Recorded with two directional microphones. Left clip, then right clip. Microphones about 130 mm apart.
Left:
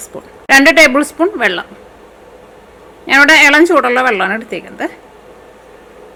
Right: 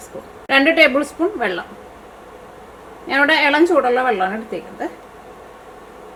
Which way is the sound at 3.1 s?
45° left (ahead or behind).